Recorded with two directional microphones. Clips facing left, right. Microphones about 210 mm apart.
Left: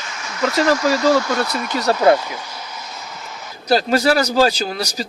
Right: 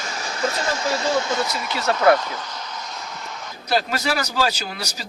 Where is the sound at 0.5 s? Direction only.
90° left.